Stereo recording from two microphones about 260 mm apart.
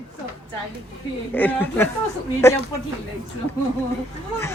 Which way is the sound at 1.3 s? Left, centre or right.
Centre.